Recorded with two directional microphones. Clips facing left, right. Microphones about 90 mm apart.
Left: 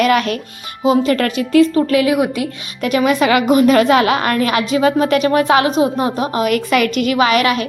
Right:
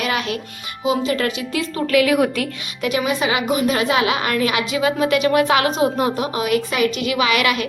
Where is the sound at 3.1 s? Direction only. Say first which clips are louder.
Left 7 dB; 60° left (ahead or behind); by 6.4 s 35° left (ahead or behind).